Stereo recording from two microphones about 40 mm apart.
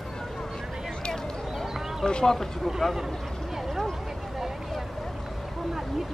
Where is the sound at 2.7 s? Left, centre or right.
Centre.